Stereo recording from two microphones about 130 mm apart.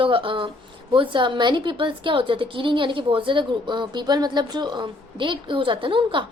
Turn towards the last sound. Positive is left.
turn(degrees=-40)  # may be behind; listen again after turning